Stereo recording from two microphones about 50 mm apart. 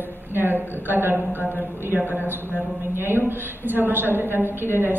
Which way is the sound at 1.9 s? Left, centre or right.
Right.